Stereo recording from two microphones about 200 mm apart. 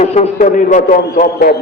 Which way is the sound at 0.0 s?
35° left (ahead or behind).